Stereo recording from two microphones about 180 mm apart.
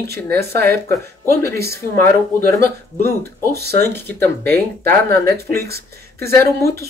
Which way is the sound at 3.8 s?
10° left (ahead or behind).